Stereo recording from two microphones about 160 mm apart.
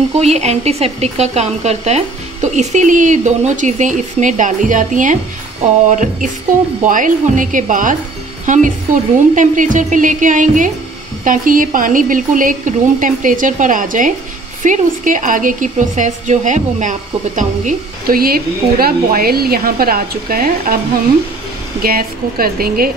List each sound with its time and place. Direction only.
0.2 s a woman's voice: 45° right (ahead or behind); by 20.8 s 65° right (ahead or behind)
21.8 s speech: 65° right (ahead or behind)